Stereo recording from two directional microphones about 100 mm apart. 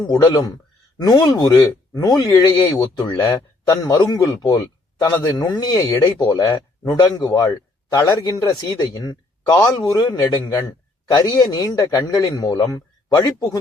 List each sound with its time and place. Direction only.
0.3 s a man's voice: 40° left (ahead or behind)